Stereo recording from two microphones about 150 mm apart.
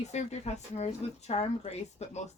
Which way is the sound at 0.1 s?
50° left (ahead or behind).